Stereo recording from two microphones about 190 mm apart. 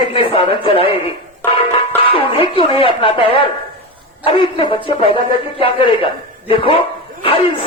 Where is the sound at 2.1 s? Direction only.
25° left (ahead or behind).